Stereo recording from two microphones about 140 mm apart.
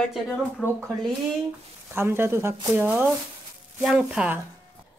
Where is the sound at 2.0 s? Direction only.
15° right (ahead or behind).